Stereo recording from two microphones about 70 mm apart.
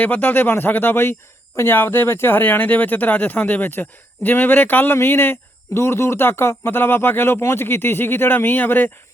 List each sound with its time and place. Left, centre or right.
0.0 s speech: left
2.4 s speech: left